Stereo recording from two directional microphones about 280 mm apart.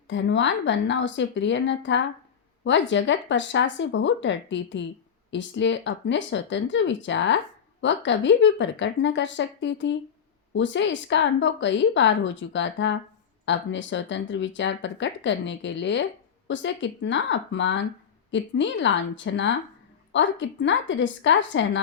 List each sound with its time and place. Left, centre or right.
0.1 s speech: left